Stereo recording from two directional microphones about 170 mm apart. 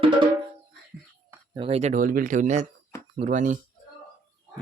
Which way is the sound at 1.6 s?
35° right (ahead or behind).